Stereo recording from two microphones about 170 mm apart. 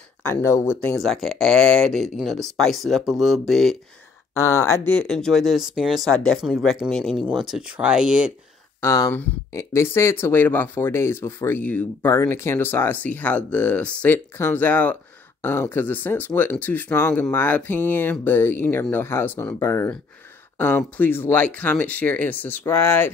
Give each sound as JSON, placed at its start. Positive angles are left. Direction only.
{"t": 0.2, "sound": "speech", "side_deg": 15}
{"t": 0.9, "sound": "speech", "side_deg": 0}
{"t": 4.3, "sound": "speech", "side_deg": 15}
{"t": 4.9, "sound": "speech", "side_deg": 5}
{"t": 8.8, "sound": "speech", "side_deg": 20}